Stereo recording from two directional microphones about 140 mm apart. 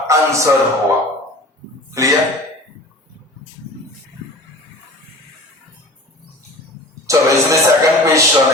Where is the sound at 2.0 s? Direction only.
20° right (ahead or behind).